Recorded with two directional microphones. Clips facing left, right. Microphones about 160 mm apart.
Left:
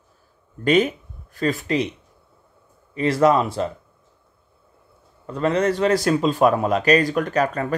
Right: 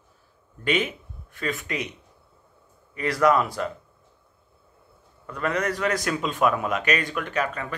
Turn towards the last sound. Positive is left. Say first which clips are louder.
# left 6 dB
turn(degrees=40)  # may be behind; listen again after turning